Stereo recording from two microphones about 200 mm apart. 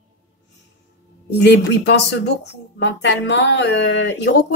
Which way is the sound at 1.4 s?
55° left (ahead or behind).